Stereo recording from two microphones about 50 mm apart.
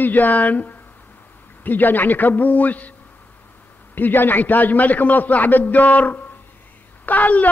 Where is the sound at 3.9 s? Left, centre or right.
Left.